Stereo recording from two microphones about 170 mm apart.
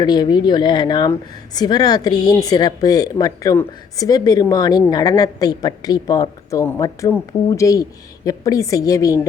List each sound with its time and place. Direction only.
0.0 s a woman's voice: 25° left (ahead or behind)